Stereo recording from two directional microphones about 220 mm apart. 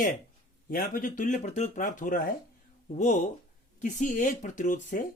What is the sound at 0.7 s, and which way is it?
Speech, 40° left (ahead or behind).